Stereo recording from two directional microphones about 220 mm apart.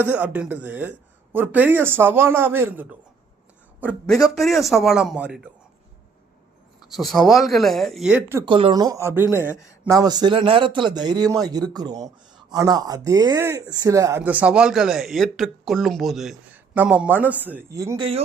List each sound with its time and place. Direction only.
0.0 s speech: 5° right (ahead or behind)
4.4 s speech: centre (ahead or behind)
6.9 s speech: centre (ahead or behind)
8.4 s speech: 25° right (ahead or behind)
9.5 s a man's voice: 10° left (ahead or behind)
9.9 s a man's voice: 15° right (ahead or behind)